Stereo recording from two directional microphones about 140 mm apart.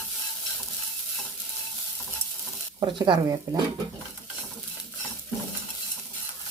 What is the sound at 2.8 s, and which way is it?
Speech, 35° right (ahead or behind).